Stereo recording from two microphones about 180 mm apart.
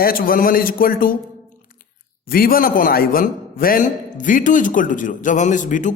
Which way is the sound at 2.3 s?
55° left (ahead or behind).